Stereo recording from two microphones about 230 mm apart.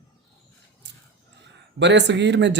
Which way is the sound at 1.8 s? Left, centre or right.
Right.